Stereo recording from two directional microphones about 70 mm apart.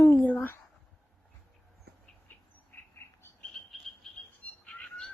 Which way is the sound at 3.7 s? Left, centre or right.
Centre.